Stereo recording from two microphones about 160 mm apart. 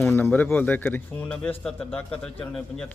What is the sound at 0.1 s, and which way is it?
A man's voice, 10° left (ahead or behind).